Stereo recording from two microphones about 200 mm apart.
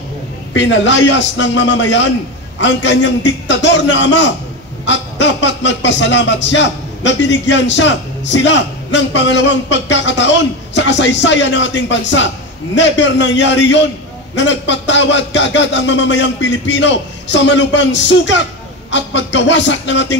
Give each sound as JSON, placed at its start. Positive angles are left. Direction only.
{"t": 0.5, "sound": "music", "side_deg": 65}